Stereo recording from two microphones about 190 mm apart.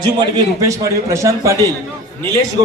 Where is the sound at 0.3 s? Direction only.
15° right (ahead or behind).